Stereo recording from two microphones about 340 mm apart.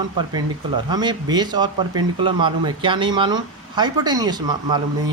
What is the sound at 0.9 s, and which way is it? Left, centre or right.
Speech, centre.